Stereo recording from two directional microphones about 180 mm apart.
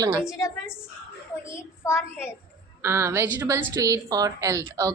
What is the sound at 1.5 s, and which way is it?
Speech, 15° left (ahead or behind).